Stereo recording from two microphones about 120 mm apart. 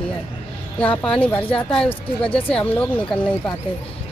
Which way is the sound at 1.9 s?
50° left (ahead or behind).